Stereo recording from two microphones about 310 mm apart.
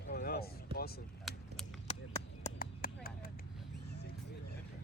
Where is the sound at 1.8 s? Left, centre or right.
Left.